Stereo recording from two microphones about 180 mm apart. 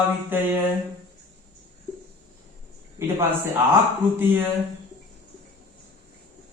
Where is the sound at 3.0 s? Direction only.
15° right (ahead or behind).